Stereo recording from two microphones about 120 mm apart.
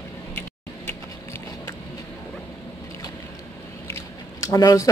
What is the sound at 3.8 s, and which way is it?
Squish, 25° left (ahead or behind).